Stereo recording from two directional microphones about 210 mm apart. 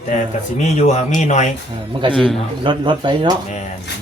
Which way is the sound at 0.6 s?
35° left (ahead or behind).